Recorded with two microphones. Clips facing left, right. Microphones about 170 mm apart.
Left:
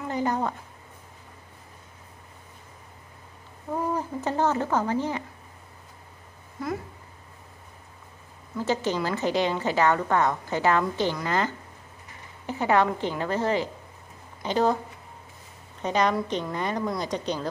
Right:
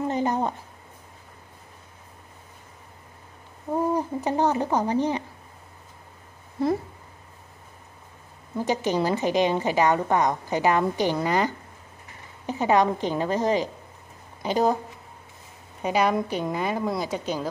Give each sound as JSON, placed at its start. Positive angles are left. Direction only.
{"t": 0.1, "sound": "a sound", "side_deg": -20}
{"t": 3.7, "sound": "speech", "side_deg": -15}
{"t": 6.6, "sound": "speech", "side_deg": -30}
{"t": 8.5, "sound": "a woman's voice", "side_deg": -15}
{"t": 15.8, "sound": "a woman's voice", "side_deg": -10}